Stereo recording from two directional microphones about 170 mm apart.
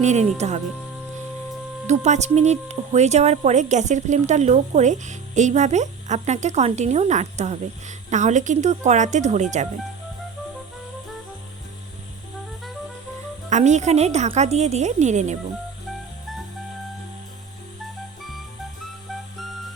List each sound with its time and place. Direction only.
0.0 s a woman's voice: 40° right (ahead or behind)
1.9 s speech: 40° right (ahead or behind)
13.5 s a woman's voice: 45° right (ahead or behind)